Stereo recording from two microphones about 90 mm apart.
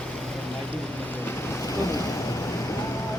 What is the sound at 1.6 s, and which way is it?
Boat, 40° left (ahead or behind).